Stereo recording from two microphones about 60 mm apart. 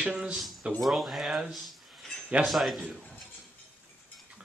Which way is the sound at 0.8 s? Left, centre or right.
Centre.